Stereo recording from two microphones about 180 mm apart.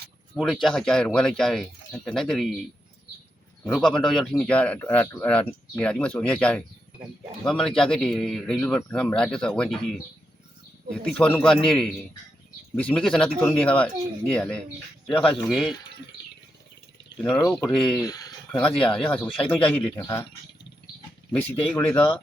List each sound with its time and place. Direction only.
0.3 s a man's voice: centre (ahead or behind)
3.7 s a man's voice: centre (ahead or behind)
17.2 s a man's voice: 10° left (ahead or behind)
18.0 s speech: 20° left (ahead or behind)
18.5 s speech: 5° left (ahead or behind)
21.7 s speech: 5° left (ahead or behind)